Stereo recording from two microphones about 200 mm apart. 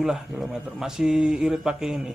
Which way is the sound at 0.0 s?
Centre (ahead or behind).